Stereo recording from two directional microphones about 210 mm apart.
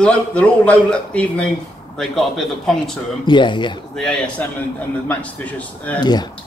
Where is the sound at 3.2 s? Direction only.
20° left (ahead or behind).